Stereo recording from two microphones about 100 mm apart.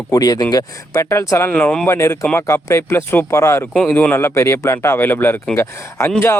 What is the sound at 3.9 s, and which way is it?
Speech, 20° left (ahead or behind).